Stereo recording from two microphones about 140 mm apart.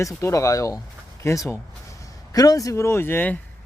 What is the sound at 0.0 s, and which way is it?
Speech, 20° left (ahead or behind).